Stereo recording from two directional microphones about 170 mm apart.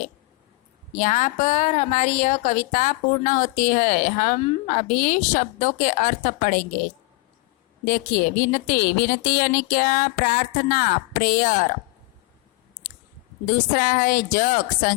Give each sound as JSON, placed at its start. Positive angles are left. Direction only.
{"t": 0.9, "sound": "a woman's voice", "side_deg": 45}
{"t": 4.4, "sound": "a woman's voice", "side_deg": 35}
{"t": 4.9, "sound": "a woman's voice", "side_deg": 50}
{"t": 7.9, "sound": "a woman's voice", "side_deg": 55}
{"t": 13.5, "sound": "a woman's voice", "side_deg": 55}